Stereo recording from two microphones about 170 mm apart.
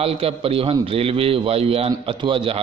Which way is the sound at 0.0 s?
35° right (ahead or behind).